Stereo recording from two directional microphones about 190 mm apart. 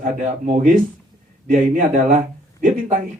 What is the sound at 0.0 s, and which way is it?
A man's voice, 40° right (ahead or behind).